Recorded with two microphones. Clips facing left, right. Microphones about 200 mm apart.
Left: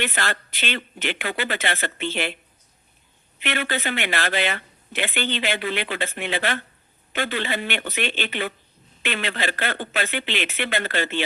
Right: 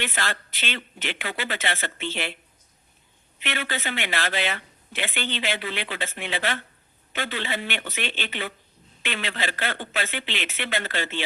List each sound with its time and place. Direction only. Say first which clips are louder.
0.0 s speech: left 3 dB; 60° left (ahead or behind)
3.4 s speech: left 4 dB; 55° left (ahead or behind)